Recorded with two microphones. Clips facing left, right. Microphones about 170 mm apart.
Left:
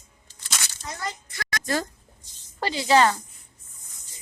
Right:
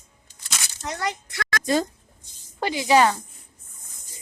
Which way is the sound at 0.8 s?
70° right (ahead or behind).